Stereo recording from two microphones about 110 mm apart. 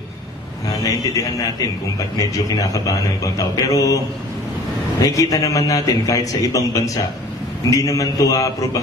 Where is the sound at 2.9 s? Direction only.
30° left (ahead or behind).